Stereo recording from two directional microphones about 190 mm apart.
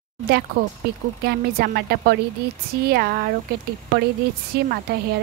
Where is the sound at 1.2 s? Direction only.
55° right (ahead or behind).